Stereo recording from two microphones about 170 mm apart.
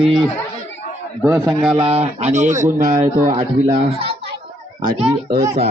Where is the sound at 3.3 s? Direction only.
25° right (ahead or behind).